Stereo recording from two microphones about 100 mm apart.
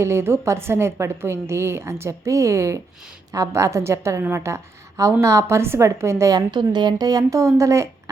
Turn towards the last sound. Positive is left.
turn(degrees=-30)  # may be behind; listen again after turning